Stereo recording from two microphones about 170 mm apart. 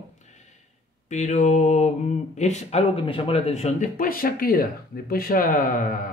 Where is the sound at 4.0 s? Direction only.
55° left (ahead or behind).